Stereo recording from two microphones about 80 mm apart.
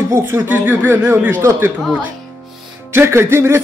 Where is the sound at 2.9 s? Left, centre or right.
Right.